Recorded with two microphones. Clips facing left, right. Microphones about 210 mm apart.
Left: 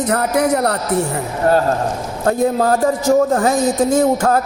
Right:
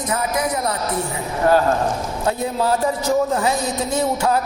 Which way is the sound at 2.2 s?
45° left (ahead or behind).